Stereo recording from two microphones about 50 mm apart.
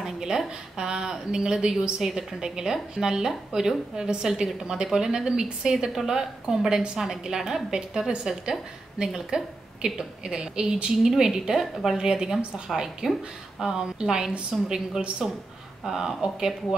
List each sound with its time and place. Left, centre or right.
0.0 s a sound: centre
0.7 s a woman's voice: centre
15.8 s a woman's voice: centre